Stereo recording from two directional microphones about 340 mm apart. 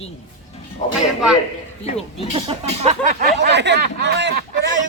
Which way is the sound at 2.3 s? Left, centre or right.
Centre.